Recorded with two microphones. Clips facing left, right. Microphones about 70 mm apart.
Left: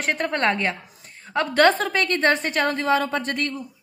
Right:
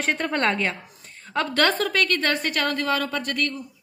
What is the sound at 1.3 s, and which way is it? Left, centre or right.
A woman's voice, centre.